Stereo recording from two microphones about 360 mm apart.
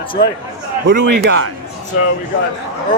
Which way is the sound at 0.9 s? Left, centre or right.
Right.